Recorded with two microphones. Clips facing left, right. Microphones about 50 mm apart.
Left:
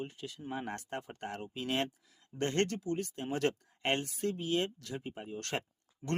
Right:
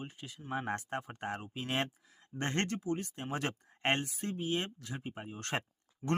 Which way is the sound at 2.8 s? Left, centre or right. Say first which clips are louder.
Left 1 dB; centre.